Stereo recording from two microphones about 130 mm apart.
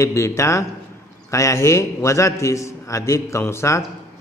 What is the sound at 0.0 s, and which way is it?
A man's voice, 20° left (ahead or behind).